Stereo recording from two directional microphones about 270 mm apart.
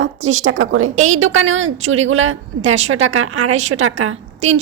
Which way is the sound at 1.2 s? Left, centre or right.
Right.